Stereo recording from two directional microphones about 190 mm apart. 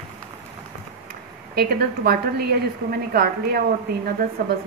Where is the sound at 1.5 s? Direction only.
55° right (ahead or behind).